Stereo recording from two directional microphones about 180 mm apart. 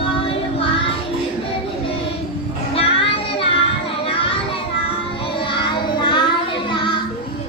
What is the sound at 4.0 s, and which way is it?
Children playing, 30° left (ahead or behind).